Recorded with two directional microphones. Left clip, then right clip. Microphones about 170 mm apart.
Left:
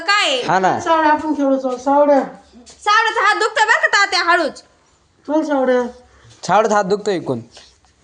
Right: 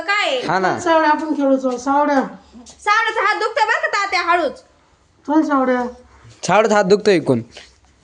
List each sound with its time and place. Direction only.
0.0 s a sound: 60° left (ahead or behind)
0.4 s a woman's voice: 10° left (ahead or behind)
0.9 s a woman's voice: 35° right (ahead or behind)
1.5 s speech: 60° right (ahead or behind)
2.8 s a sound: 50° left (ahead or behind)
5.2 s speech: 30° right (ahead or behind)
6.4 s speech: 15° right (ahead or behind)
6.8 s a woman's voice: 30° right (ahead or behind)